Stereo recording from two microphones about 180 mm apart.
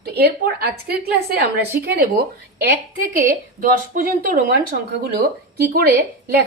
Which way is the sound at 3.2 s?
50° right (ahead or behind).